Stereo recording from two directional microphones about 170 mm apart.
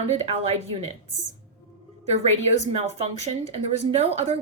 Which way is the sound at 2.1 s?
40° right (ahead or behind).